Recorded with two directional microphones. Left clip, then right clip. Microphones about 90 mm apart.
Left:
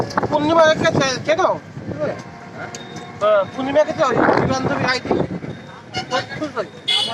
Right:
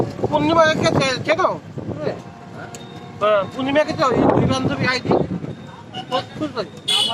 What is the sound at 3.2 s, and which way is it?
Speech, 35° left (ahead or behind).